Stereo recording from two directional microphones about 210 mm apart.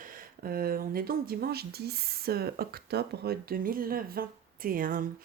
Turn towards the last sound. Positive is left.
turn(degrees=-40)  # may be behind; listen again after turning